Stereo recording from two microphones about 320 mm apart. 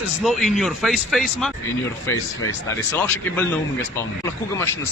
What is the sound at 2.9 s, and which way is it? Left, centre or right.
Speech, centre.